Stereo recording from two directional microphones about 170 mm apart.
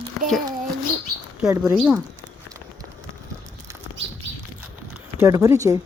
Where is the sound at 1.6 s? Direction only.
5° right (ahead or behind).